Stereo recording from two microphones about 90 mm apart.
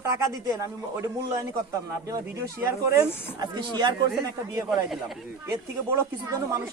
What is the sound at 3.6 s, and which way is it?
Speech, 50° right (ahead or behind).